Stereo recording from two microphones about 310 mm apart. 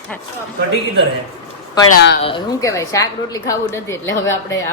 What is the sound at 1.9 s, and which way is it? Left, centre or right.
Speech, left.